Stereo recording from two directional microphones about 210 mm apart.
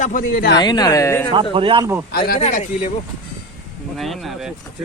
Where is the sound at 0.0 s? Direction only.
40° left (ahead or behind).